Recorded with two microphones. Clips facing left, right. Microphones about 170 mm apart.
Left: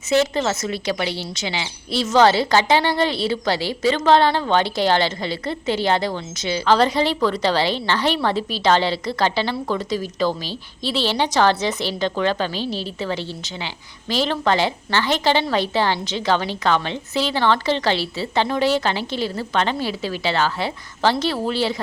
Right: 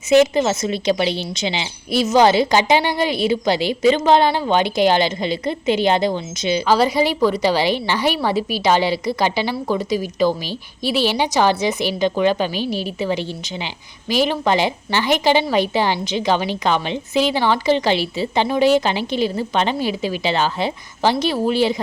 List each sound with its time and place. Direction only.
0.1 s a woman's voice: 15° right (ahead or behind)